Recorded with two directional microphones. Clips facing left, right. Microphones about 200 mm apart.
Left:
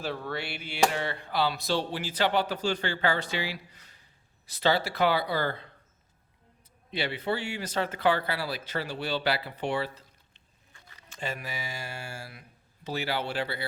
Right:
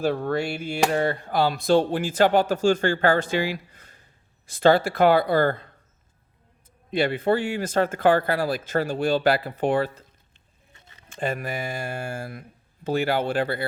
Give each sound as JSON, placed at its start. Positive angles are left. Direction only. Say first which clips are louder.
{"t": 0.0, "sound": "speech", "louder": "right 10 dB", "side_deg": -50}
{"t": 6.9, "sound": "speech", "louder": "right 9 dB", "side_deg": -50}
{"t": 10.8, "sound": "a sound", "louder": "right 1 dB", "side_deg": -25}
{"t": 11.1, "sound": "speech", "louder": "right 8 dB", "side_deg": -50}